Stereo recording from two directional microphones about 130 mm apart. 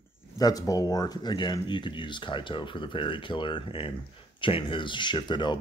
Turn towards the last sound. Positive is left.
turn(degrees=35)  # may be behind; listen again after turning